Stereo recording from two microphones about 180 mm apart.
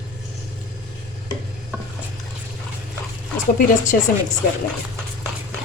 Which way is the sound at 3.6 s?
50° left (ahead or behind).